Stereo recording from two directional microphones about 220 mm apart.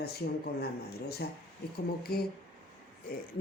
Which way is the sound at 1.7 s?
45° left (ahead or behind).